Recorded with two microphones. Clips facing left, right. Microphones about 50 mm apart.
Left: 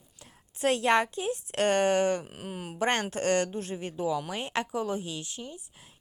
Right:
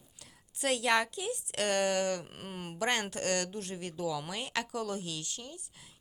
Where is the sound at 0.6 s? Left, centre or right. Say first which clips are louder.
Left 5 dB; left.